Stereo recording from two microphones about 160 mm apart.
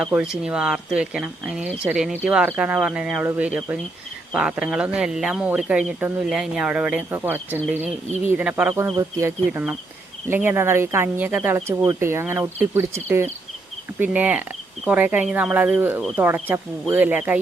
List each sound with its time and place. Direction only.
0.0 s speech: 5° right (ahead or behind)
9.5 s speech: 5° right (ahead or behind)